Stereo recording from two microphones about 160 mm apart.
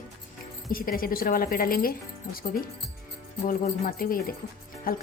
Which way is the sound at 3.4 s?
60° left (ahead or behind).